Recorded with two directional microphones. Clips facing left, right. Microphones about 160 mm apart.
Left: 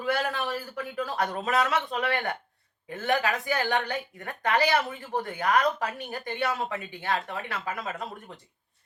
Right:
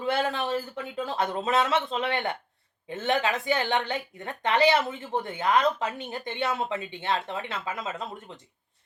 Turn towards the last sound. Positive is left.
turn(degrees=-25)  # may be behind; listen again after turning